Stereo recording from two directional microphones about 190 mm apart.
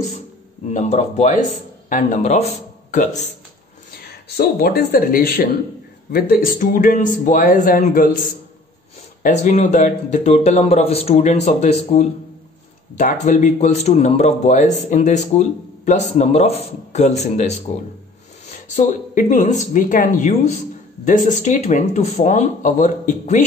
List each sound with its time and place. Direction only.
0.7 s speech: 35° left (ahead or behind)
4.4 s speech: 55° left (ahead or behind)
9.2 s speech: 40° left (ahead or behind)
18.8 s speech: 40° left (ahead or behind)